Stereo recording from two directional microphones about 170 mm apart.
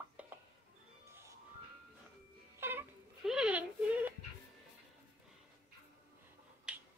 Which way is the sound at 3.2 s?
5° right (ahead or behind).